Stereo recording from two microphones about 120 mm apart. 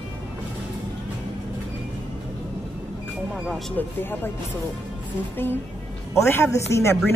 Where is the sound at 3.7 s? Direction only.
15° left (ahead or behind).